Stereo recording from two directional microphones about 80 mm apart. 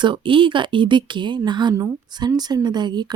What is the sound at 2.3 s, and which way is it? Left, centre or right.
Speech, right.